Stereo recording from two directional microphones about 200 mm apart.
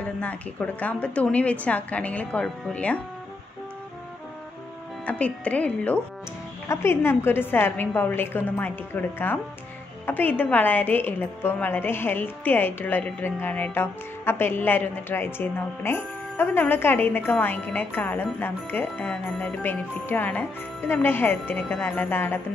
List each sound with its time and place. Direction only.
0.2 s a woman's voice: 5° left (ahead or behind)
5.0 s a woman's voice: 5° left (ahead or behind)